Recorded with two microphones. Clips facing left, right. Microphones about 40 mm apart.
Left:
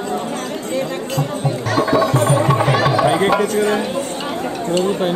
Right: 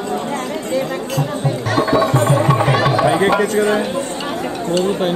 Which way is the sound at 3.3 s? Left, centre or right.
Centre.